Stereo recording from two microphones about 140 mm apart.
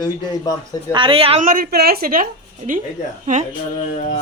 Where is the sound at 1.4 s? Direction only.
80° right.